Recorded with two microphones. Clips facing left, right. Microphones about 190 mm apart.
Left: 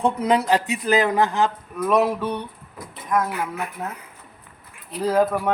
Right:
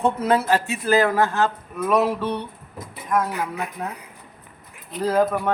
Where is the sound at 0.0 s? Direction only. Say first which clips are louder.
Even; 15° left (ahead or behind).